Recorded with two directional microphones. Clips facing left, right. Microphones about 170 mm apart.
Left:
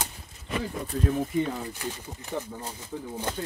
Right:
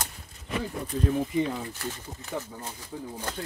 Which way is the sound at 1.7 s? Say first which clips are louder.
Left 1 dB; 15° left (ahead or behind).